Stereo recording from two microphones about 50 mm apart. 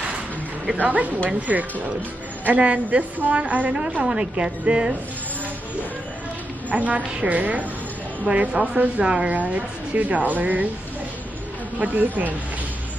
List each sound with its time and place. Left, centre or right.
0.8 s a woman's voice: right
6.7 s a woman's voice: right
9.3 s speech: right
11.8 s speech: right